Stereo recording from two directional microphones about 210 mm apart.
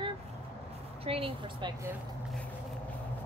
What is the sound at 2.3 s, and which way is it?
Vehicle, 5° left (ahead or behind).